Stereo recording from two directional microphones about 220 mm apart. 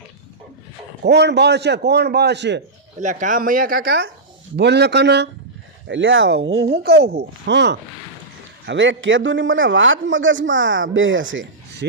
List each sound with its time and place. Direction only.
1.0 s a man's voice: 50° right (ahead or behind)
3.0 s a man's voice: 35° right (ahead or behind); by 6.5 s 55° right (ahead or behind)
6.6 s a man's voice: 45° right (ahead or behind)